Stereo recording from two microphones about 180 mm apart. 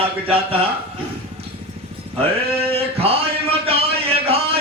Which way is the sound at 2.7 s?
35° right (ahead or behind).